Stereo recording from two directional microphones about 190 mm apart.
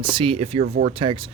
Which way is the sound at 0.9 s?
25° right (ahead or behind).